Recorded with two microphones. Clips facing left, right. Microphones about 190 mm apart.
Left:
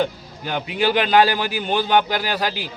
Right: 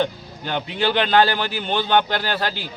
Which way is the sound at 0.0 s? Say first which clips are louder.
Even; 5° left (ahead or behind).